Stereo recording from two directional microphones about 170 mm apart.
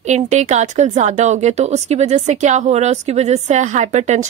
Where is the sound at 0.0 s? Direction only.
45° right (ahead or behind).